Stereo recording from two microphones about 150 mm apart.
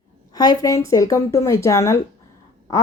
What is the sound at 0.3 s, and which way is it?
Speech, 25° left (ahead or behind).